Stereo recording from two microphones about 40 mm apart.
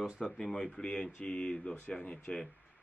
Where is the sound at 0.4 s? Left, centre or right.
Centre.